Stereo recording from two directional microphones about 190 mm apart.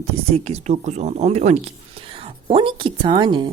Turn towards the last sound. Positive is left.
turn(degrees=-25)  # may be behind; listen again after turning